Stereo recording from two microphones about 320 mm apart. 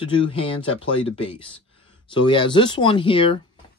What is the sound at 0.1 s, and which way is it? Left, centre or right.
Speech, centre.